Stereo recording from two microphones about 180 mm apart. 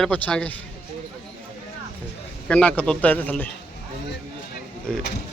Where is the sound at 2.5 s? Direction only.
5° left (ahead or behind).